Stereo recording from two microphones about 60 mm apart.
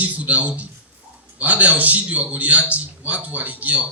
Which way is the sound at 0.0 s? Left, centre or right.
Right.